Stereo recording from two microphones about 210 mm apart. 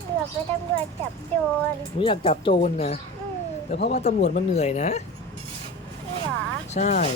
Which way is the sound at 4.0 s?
30° left (ahead or behind).